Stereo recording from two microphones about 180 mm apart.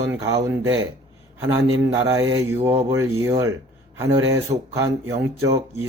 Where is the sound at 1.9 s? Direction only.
20° right (ahead or behind).